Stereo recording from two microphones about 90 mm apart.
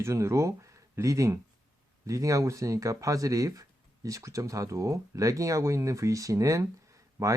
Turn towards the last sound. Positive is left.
turn(degrees=-35)  # may be behind; listen again after turning